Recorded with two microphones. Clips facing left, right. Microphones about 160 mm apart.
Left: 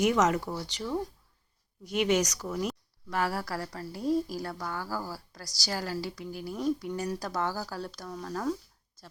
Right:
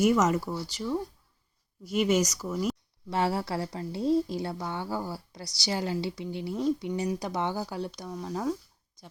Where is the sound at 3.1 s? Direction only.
25° right (ahead or behind).